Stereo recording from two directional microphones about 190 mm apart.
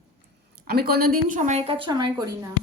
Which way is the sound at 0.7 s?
55° right (ahead or behind).